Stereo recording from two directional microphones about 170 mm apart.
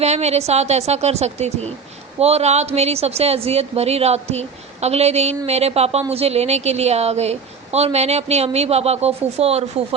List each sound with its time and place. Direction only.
0.0 s a woman's voice: 40° right (ahead or behind)